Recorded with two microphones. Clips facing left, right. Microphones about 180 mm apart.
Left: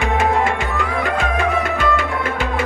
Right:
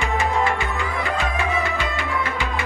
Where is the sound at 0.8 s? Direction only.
70° left (ahead or behind).